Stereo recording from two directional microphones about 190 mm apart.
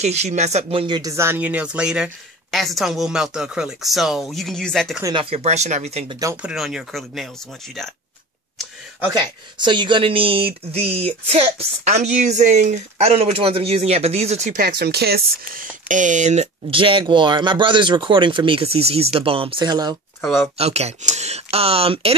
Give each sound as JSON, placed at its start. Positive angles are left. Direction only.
{"t": 0.0, "sound": "speech", "side_deg": -35}
{"t": 5.0, "sound": "speech", "side_deg": -25}
{"t": 6.4, "sound": "speech", "side_deg": -5}
{"t": 9.2, "sound": "speech", "side_deg": -25}
{"t": 14.8, "sound": "speech", "side_deg": -55}
{"t": 20.5, "sound": "speech", "side_deg": -35}